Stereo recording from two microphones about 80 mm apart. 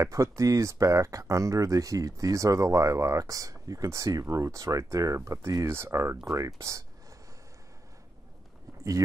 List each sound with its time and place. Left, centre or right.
0.0 s speech: right